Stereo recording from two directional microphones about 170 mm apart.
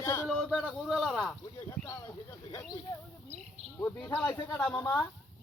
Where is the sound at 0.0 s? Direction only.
20° left (ahead or behind).